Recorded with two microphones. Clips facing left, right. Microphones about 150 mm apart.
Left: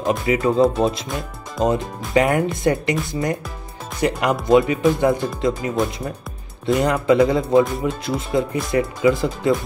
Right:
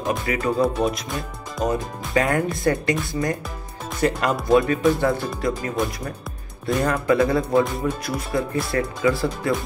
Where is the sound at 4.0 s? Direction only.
15° left (ahead or behind).